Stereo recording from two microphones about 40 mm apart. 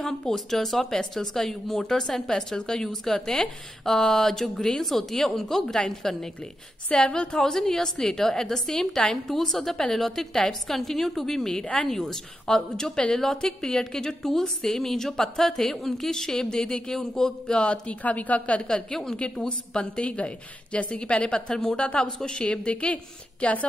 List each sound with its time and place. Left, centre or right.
0.3 s a woman's voice: centre
6.9 s a woman's voice: left
7.3 s a woman's voice: centre
18.0 s a woman's voice: left
18.6 s a woman's voice: centre
19.8 s a woman's voice: left